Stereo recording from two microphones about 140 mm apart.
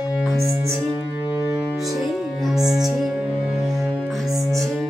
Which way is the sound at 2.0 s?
Centre (ahead or behind).